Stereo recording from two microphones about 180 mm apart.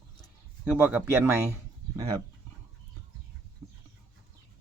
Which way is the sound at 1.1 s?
15° right (ahead or behind).